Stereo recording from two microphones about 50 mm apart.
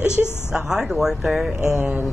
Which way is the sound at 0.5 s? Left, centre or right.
Centre.